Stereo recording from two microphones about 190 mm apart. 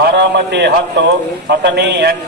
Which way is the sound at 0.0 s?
65° right (ahead or behind).